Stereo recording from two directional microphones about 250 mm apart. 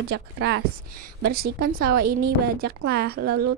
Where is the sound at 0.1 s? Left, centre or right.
Right.